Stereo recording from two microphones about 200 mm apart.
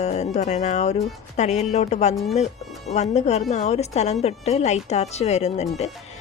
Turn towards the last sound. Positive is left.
turn(degrees=35)  # may be behind; listen again after turning